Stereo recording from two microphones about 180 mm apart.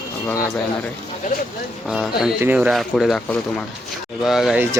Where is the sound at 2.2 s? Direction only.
5° right (ahead or behind).